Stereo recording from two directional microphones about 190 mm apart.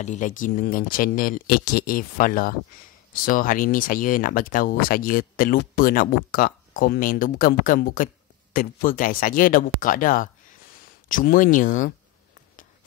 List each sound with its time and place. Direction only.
0.0 s speech: 40° left (ahead or behind)